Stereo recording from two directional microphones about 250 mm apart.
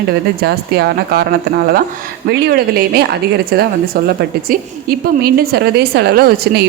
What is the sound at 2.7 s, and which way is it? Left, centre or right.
Speech, right.